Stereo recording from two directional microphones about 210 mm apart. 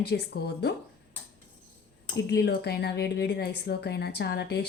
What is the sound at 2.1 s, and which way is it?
A woman's voice, 50° left (ahead or behind).